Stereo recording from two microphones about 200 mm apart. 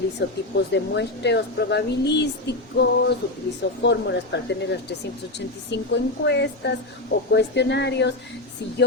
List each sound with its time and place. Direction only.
0.2 s speech: 60° left (ahead or behind)